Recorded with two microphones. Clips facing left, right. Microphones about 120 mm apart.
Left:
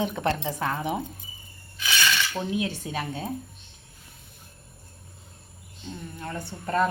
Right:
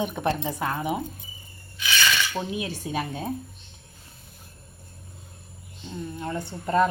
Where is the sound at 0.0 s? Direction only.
15° right (ahead or behind).